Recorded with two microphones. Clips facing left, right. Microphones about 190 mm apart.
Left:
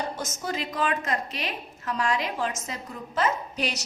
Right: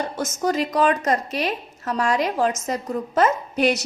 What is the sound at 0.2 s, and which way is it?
A woman's voice, 45° right (ahead or behind).